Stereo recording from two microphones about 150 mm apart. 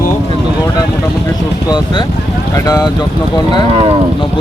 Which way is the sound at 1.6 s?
30° left (ahead or behind).